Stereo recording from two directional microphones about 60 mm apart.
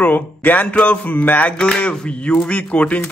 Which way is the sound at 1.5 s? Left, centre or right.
Centre.